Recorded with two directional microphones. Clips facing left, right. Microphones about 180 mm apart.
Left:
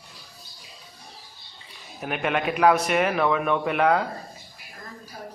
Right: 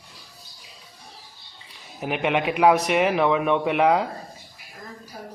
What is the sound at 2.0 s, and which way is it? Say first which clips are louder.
A man's voice: right 3 dB; 15° right (ahead or behind).